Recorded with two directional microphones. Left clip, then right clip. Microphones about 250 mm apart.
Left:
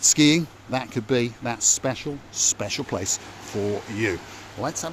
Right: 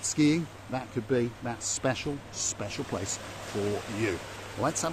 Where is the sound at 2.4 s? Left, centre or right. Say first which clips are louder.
Left 10 dB; left.